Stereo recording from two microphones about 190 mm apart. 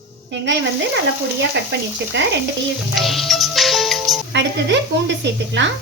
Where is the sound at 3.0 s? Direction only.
Centre (ahead or behind).